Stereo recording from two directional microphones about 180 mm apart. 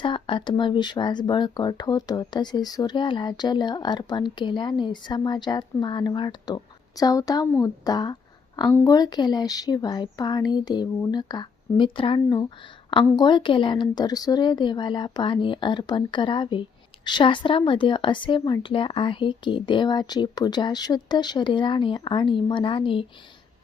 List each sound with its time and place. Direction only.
0.0 s speech: 25° left (ahead or behind)